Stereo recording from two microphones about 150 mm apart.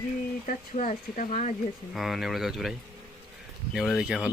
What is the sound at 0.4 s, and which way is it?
Speech, 60° left (ahead or behind).